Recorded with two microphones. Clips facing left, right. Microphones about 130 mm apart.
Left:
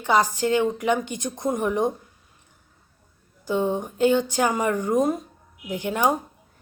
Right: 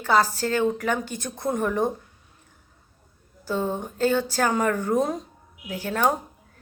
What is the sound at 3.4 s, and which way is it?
A woman's voice, 15° left (ahead or behind).